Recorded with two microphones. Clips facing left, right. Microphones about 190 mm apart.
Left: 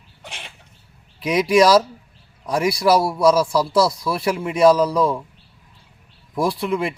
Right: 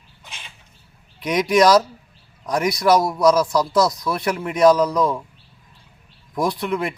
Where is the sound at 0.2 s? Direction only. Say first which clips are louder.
Left 5 dB; 70° left (ahead or behind).